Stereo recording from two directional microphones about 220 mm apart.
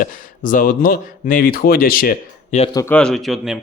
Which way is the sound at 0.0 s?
40° left (ahead or behind).